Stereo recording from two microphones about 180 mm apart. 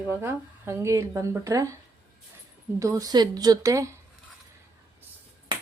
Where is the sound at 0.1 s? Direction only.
15° right (ahead or behind).